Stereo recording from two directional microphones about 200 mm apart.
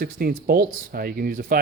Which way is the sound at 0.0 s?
50° right (ahead or behind).